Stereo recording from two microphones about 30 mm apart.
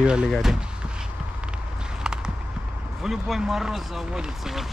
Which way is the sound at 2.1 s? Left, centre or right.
Right.